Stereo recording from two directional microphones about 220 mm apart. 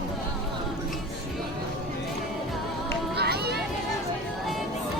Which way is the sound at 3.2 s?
45° right (ahead or behind).